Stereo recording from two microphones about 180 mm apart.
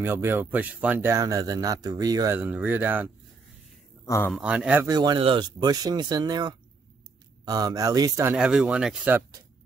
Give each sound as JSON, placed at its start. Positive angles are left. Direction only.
{"t": 0.0, "sound": "speech", "side_deg": -15}
{"t": 2.3, "sound": "speech", "side_deg": -10}
{"t": 4.0, "sound": "a sound", "side_deg": 15}
{"t": 4.3, "sound": "speech", "side_deg": -5}
{"t": 4.8, "sound": "speech", "side_deg": -20}
{"t": 8.4, "sound": "speech", "side_deg": -5}